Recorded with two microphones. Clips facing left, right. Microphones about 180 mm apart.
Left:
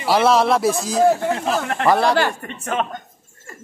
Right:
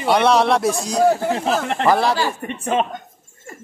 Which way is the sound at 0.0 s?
5° left (ahead or behind).